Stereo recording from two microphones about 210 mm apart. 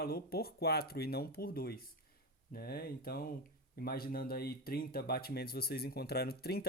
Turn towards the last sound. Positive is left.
turn(degrees=45)  # may be behind; listen again after turning